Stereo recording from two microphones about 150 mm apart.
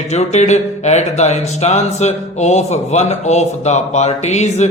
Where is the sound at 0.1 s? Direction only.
50° left (ahead or behind).